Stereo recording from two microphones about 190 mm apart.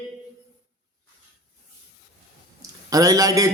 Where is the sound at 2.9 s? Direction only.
20° right (ahead or behind).